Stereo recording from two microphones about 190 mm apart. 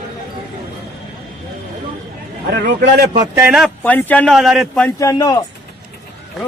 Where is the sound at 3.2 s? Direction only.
15° right (ahead or behind).